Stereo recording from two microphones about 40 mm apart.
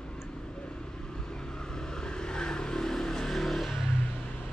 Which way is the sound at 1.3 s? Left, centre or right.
Centre.